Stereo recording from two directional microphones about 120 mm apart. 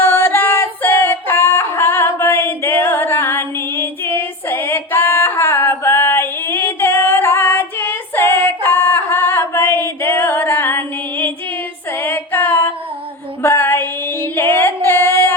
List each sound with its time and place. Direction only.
0.0 s a sound: 20° left (ahead or behind)
11.9 s music: 20° left (ahead or behind)
13.4 s female singing: 15° left (ahead or behind)